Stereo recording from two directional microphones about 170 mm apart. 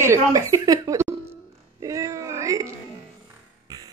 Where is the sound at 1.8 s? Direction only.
20° right (ahead or behind).